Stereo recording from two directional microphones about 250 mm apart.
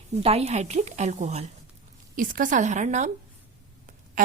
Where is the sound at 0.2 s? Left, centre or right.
Right.